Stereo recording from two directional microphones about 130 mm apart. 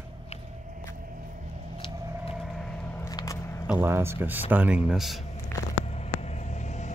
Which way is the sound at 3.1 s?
25° left (ahead or behind).